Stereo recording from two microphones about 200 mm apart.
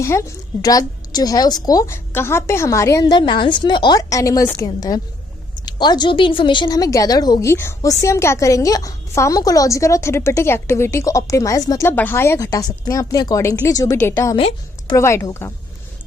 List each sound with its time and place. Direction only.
0.0 s a woman's voice: 15° left (ahead or behind)
14.3 s a woman's voice: 25° left (ahead or behind)
14.9 s a woman's voice: 15° left (ahead or behind)